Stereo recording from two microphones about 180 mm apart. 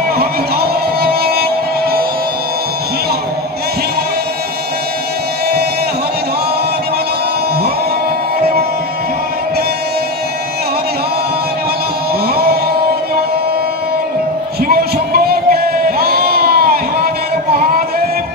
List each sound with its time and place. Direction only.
0.2 s music: 60° right (ahead or behind)
8.4 s music: 60° right (ahead or behind)
14.6 s a sound: 55° right (ahead or behind)